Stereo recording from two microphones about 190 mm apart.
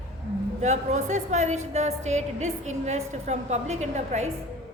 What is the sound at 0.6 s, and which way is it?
A woman's voice, 35° right (ahead or behind).